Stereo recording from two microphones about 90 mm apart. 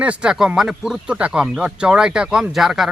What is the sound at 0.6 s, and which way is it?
Speech, 5° right (ahead or behind).